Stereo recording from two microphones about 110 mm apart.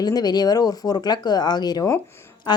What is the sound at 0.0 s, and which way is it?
Speech, 35° left (ahead or behind).